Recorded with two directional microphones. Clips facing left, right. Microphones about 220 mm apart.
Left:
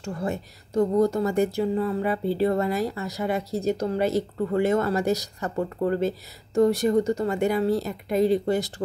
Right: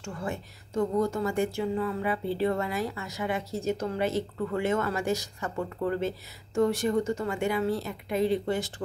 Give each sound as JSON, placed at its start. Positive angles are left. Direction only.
{"t": 0.0, "sound": "speech", "side_deg": 35}